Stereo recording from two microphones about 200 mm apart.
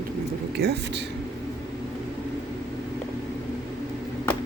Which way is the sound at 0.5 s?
55° right (ahead or behind).